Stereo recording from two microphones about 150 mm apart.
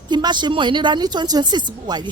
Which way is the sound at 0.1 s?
30° right (ahead or behind).